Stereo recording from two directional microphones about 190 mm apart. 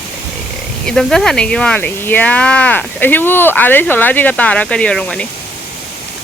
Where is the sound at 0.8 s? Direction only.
5° left (ahead or behind).